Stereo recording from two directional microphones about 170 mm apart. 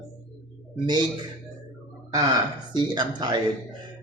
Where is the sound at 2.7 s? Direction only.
25° right (ahead or behind).